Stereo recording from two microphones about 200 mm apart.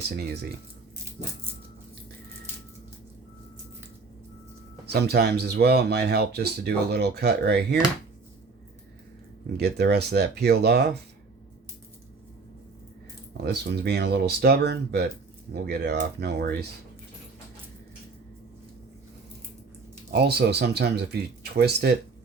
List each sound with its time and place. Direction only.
4.9 s speech: 55° right (ahead or behind)
9.5 s speech: 55° right (ahead or behind)
13.3 s speech: 55° right (ahead or behind)
20.1 s speech: 55° right (ahead or behind)